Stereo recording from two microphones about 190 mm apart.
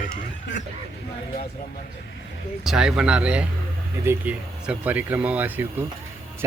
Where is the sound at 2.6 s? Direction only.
5° right (ahead or behind).